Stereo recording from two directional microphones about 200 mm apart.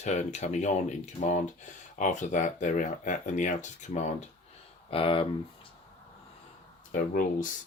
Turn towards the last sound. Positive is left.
turn(degrees=45)  # may be behind; listen again after turning